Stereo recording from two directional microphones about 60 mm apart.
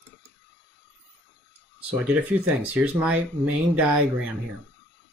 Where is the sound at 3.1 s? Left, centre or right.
Right.